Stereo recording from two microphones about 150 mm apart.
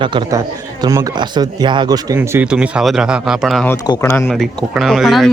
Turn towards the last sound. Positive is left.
turn(degrees=0)  # may be behind; listen again after turning